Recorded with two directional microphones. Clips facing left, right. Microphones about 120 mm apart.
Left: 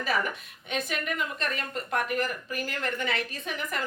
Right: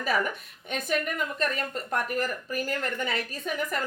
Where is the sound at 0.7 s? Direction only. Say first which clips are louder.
Right 2 dB; 45° right (ahead or behind).